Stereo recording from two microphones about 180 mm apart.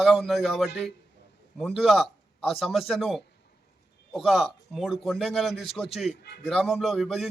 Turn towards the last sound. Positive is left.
turn(degrees=0)  # may be behind; listen again after turning